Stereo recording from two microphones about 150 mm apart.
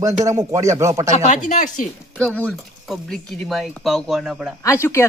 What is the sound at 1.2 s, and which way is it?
Speech, 55° left (ahead or behind).